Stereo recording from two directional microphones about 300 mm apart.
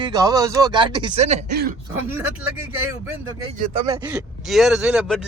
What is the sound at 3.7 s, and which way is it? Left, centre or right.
Speech, centre.